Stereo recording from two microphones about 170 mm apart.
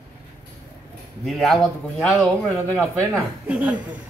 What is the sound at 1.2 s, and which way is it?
Speech, centre (ahead or behind).